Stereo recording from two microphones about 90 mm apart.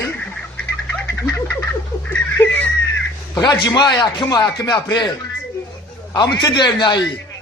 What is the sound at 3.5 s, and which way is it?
Speech, 55° left (ahead or behind).